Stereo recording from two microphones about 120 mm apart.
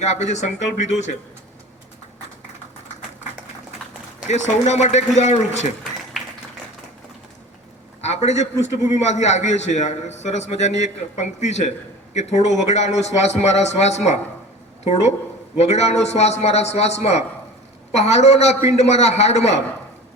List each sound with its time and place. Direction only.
0.0 s a man's voice: 75° left (ahead or behind)
4.3 s a man's voice: 75° left (ahead or behind)
8.0 s a sound: 65° left (ahead or behind)
8.6 s a man's voice: 70° left (ahead or behind)
15.5 s a man's voice: 65° left (ahead or behind)